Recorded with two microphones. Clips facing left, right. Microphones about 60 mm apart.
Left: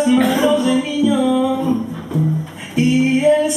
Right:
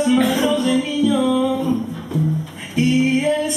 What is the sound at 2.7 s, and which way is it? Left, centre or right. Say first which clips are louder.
Female singing: left 2 dB; centre.